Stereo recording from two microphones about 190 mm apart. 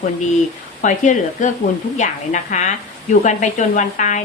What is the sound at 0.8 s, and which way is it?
Speech, 40° left (ahead or behind).